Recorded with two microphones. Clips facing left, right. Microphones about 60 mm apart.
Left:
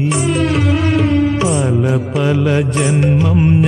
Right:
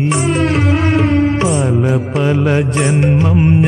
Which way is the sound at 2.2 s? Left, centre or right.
Centre.